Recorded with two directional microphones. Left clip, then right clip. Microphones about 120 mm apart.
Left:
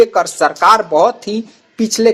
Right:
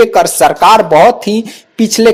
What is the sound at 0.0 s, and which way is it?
Speech, 40° right (ahead or behind).